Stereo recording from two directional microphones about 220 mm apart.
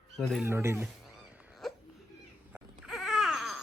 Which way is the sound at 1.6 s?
Centre (ahead or behind).